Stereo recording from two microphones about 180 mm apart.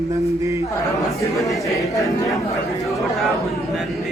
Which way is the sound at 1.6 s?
15° left (ahead or behind).